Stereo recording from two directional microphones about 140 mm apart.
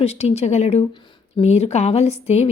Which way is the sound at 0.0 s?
45° left (ahead or behind).